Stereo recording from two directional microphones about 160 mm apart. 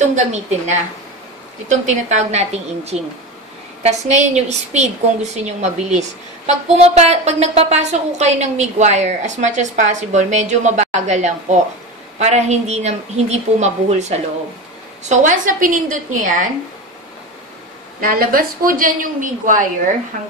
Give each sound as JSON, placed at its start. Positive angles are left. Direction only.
{"t": 0.1, "sound": "a woman's voice", "side_deg": -45}
{"t": 18.0, "sound": "a woman's voice", "side_deg": -65}